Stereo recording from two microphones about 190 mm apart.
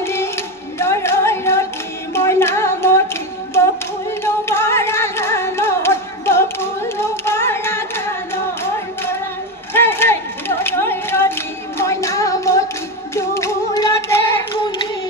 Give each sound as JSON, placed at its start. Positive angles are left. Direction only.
{"t": 0.0, "sound": "music", "side_deg": 15}
{"t": 4.2, "sound": "carnatic music", "side_deg": 15}
{"t": 9.8, "sound": "a sound", "side_deg": 10}
{"t": 11.8, "sound": "music", "side_deg": 15}